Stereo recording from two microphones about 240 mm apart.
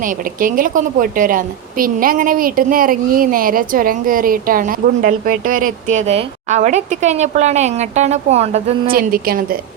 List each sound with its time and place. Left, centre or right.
0.0 s a woman's voice: right